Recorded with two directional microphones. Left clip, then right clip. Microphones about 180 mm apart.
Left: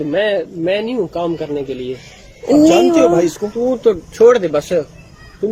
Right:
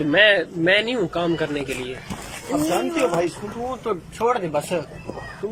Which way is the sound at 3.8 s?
55° left (ahead or behind).